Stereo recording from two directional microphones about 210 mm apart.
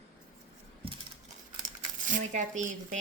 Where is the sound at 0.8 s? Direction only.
25° right (ahead or behind).